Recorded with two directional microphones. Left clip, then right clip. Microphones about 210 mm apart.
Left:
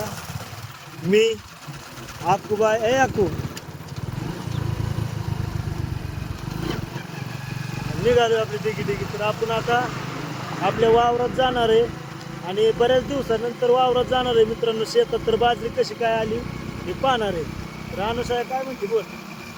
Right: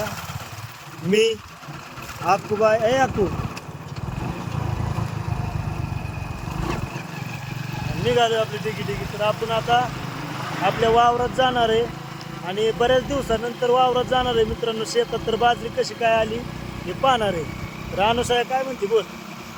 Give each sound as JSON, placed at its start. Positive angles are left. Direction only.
{"t": 1.1, "sound": "speech", "side_deg": -5}
{"t": 2.2, "sound": "speech", "side_deg": 10}
{"t": 8.0, "sound": "speech", "side_deg": 0}
{"t": 17.9, "sound": "speech", "side_deg": -30}